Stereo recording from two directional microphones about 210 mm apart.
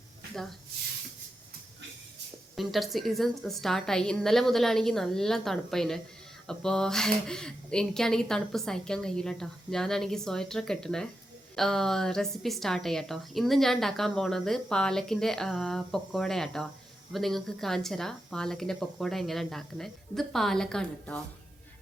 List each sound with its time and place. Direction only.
2.6 s a woman's voice: centre (ahead or behind)